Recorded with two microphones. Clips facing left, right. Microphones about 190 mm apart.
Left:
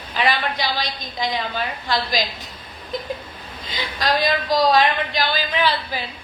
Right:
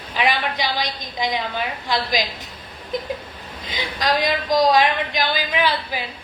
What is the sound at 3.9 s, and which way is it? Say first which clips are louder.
A woman's voice: even; 15° right (ahead or behind).